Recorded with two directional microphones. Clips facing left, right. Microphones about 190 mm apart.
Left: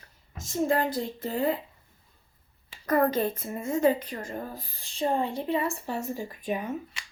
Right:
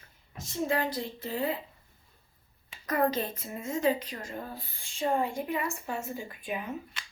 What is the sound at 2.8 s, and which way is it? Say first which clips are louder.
A woman's voice: left 4 dB; 50° left (ahead or behind).